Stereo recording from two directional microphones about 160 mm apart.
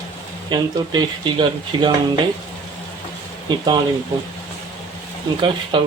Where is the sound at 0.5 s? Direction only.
30° right (ahead or behind).